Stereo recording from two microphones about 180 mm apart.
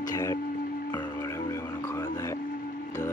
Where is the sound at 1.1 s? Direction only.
15° left (ahead or behind).